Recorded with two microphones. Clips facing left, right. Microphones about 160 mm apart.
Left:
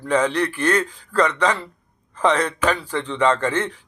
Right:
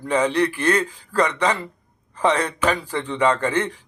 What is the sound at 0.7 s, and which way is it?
Speech, 35° right (ahead or behind).